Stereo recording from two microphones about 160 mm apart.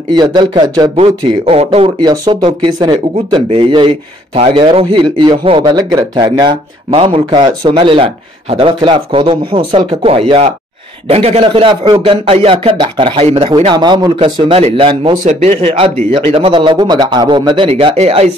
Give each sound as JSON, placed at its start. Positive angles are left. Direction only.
{"t": 0.1, "sound": "a man's voice", "side_deg": -25}
{"t": 0.9, "sound": "a man's voice", "side_deg": -40}
{"t": 2.0, "sound": "a man's voice", "side_deg": -30}
{"t": 13.7, "sound": "a man's voice", "side_deg": -30}
{"t": 17.6, "sound": "a man's voice", "side_deg": -40}